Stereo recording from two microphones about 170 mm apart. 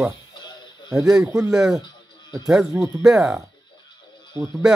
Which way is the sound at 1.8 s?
25° left (ahead or behind).